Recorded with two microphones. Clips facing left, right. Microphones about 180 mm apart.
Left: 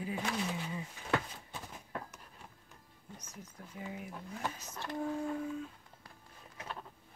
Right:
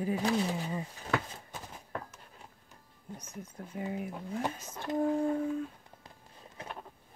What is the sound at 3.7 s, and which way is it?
Speech, 60° right (ahead or behind).